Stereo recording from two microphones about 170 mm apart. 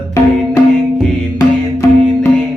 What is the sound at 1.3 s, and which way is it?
Music, 20° left (ahead or behind).